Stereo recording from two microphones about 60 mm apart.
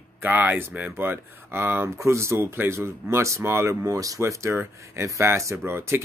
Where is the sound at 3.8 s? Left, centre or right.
Right.